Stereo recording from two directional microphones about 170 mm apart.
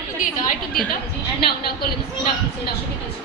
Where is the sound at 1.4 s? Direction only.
65° left (ahead or behind).